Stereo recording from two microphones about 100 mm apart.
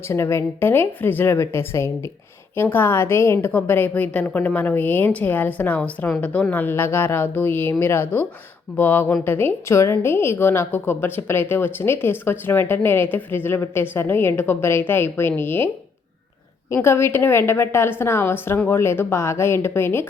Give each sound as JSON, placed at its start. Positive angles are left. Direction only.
{"t": 0.1, "sound": "a woman's voice", "side_deg": 25}